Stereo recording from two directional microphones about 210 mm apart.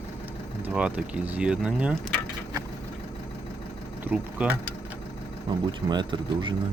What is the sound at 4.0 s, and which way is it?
Speech, 10° right (ahead or behind).